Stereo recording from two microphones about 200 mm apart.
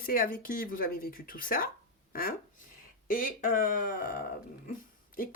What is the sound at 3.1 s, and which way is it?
Speech, 45° left (ahead or behind).